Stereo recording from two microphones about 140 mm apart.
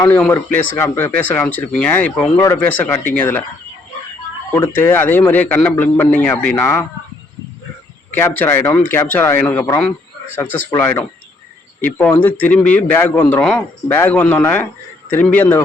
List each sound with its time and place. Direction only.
0.2 s a man's voice: 15° left (ahead or behind)
4.5 s a man's voice: 15° left (ahead or behind)
8.1 s a man's voice: 15° left (ahead or behind)
10.7 s a man's voice: 15° left (ahead or behind)